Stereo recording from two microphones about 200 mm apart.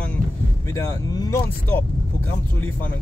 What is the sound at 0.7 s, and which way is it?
Speech, 15° left (ahead or behind).